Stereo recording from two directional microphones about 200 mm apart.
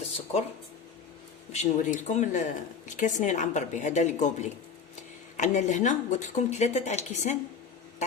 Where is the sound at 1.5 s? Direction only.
35° left (ahead or behind).